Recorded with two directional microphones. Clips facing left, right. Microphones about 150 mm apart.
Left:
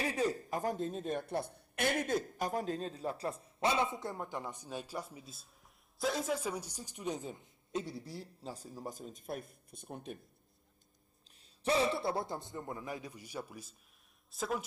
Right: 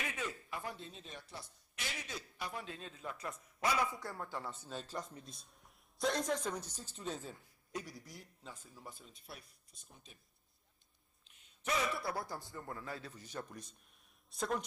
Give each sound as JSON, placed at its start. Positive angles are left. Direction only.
{"t": 0.0, "sound": "a man's voice", "side_deg": 35}
{"t": 11.2, "sound": "a man's voice", "side_deg": 35}